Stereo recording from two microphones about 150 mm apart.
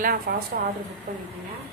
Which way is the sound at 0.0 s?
75° right (ahead or behind).